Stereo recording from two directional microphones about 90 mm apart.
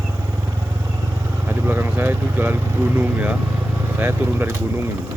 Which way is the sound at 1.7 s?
25° right (ahead or behind).